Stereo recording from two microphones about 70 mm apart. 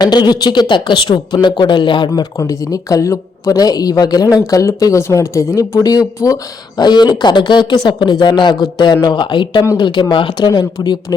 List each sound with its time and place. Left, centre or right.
0.0 s speech: left
1.3 s speech: left
2.4 s speech: left
3.6 s speech: left
6.7 s speech: left